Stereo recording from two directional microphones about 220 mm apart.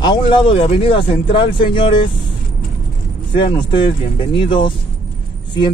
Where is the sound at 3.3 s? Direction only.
20° left (ahead or behind).